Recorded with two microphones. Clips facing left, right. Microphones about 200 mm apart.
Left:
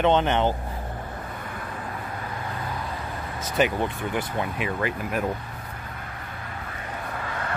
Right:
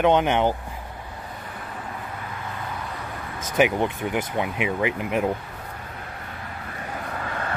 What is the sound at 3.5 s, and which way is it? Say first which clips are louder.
Speech: right 3 dB; 15° right (ahead or behind).